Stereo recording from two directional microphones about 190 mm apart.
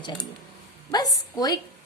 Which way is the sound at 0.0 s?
25° left (ahead or behind).